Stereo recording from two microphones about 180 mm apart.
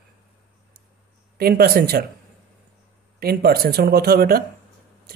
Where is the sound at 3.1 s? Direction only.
55° right (ahead or behind).